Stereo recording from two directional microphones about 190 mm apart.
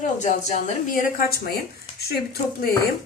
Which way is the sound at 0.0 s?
40° left (ahead or behind).